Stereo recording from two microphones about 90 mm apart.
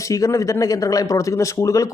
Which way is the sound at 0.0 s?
35° left (ahead or behind).